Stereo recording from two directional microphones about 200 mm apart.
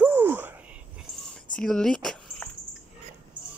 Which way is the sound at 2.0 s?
Centre (ahead or behind).